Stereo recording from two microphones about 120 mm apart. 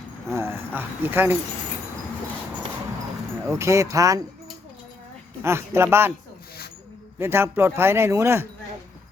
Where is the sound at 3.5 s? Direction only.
25° right (ahead or behind).